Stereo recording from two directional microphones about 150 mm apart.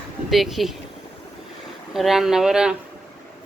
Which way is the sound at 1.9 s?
Centre (ahead or behind).